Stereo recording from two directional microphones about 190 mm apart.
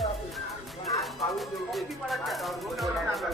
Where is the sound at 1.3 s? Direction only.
Centre (ahead or behind).